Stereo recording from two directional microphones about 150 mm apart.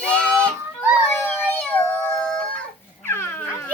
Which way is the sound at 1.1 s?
15° left (ahead or behind).